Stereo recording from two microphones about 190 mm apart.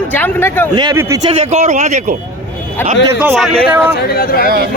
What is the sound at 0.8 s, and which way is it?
Speech, 20° right (ahead or behind).